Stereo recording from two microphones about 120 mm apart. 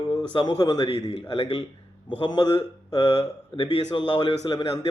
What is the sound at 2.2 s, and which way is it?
Speech, 45° left (ahead or behind).